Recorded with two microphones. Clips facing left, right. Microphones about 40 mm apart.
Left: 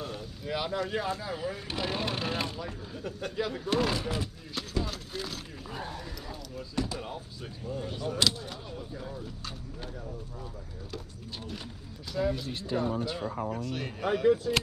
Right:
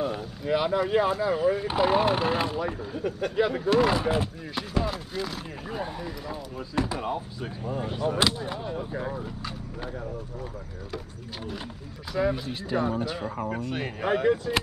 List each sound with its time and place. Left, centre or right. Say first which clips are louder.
0.0 s boat: right 8 dB; centre
1.2 s speech: right 11 dB; centre
3.3 s speech: right 7 dB; right
4.8 s speech: right 6 dB; centre
8.9 s speech: right 7 dB; right
12.2 s speech: right 4 dB; right
12.7 s speech: right 3 dB; right